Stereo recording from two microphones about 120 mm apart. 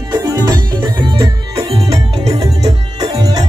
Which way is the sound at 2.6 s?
35° right (ahead or behind).